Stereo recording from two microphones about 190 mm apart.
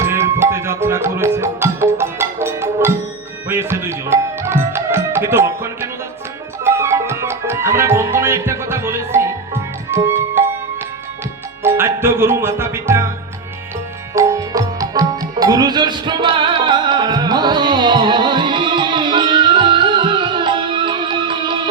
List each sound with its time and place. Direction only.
0.0 s music: 15° right (ahead or behind)
6.7 s speech: 15° right (ahead or behind)
9.9 s music: 10° right (ahead or behind)
11.6 s music: 10° right (ahead or behind)
14.1 s music: 15° right (ahead or behind)